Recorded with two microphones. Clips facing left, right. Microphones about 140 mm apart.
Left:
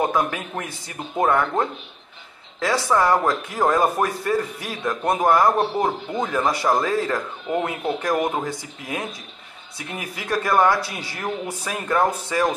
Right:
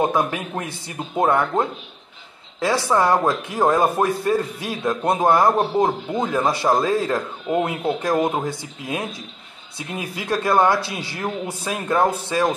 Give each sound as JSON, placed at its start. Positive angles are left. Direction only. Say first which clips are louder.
{"t": 0.0, "sound": "a man's voice", "louder": "right 2 dB", "side_deg": -20}
{"t": 3.0, "sound": "a man's voice", "louder": "right 1 dB", "side_deg": -20}